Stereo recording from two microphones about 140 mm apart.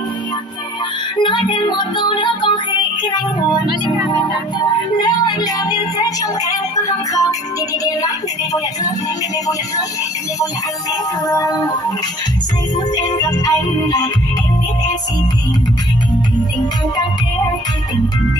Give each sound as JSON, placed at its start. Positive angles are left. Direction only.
{"t": 1.2, "sound": "music", "side_deg": 35}
{"t": 11.2, "sound": "music", "side_deg": 25}
{"t": 12.9, "sound": "music", "side_deg": 30}